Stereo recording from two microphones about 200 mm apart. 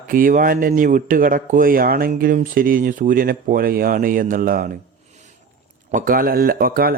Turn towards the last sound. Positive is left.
turn(degrees=-45)  # may be behind; listen again after turning